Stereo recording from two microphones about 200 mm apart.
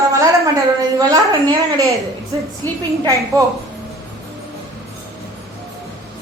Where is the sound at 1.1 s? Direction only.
20° right (ahead or behind).